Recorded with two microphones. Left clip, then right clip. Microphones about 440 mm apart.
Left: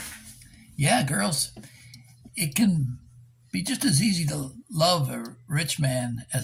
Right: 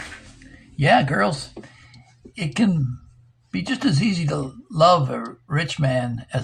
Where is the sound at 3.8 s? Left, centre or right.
Left.